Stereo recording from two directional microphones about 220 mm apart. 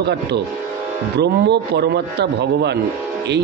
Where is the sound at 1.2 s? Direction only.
50° right (ahead or behind).